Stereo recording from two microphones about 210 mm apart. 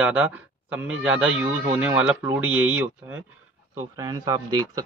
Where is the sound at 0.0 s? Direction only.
5° right (ahead or behind).